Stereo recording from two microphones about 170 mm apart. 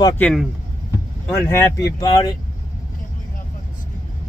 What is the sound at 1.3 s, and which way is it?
Speech, 15° left (ahead or behind).